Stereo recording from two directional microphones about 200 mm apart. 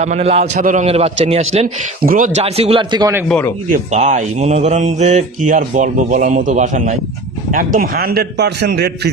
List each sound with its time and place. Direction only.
0.0 s speech: 35° right (ahead or behind)
2.0 s speech: 40° right (ahead or behind); by 3.2 s 20° right (ahead or behind)
3.2 s speech: 10° left (ahead or behind)
3.7 s a man's voice: 35° right (ahead or behind); by 8.9 s 55° right (ahead or behind)